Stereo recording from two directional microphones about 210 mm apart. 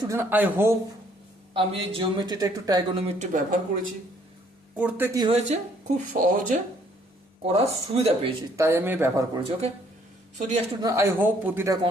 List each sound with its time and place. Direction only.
0.0 s speech: 15° right (ahead or behind)
1.5 s a man's voice: 25° right (ahead or behind)
3.2 s speech: 40° right (ahead or behind)
4.8 s speech: 10° right (ahead or behind)
5.2 s a man's voice: 30° right (ahead or behind)
8.5 s speech: 10° right (ahead or behind)
10.3 s speech: 35° right (ahead or behind)
10.8 s speech: 10° right (ahead or behind)